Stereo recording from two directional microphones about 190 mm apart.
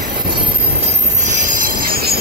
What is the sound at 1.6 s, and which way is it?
Train, 45° right (ahead or behind).